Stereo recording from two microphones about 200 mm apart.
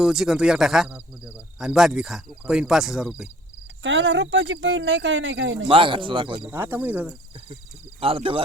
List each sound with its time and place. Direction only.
0.0 s cricket: centre (ahead or behind)
3.8 s speech: 70° right (ahead or behind)
5.6 s speech: 25° right (ahead or behind)
6.4 s speech: 10° right (ahead or behind)
8.0 s speech: 25° right (ahead or behind)